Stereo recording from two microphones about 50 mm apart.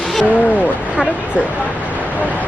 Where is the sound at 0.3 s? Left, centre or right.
Left.